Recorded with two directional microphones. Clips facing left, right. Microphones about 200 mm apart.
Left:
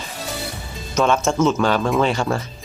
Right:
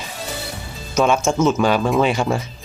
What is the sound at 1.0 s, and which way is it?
Speech, 10° right (ahead or behind).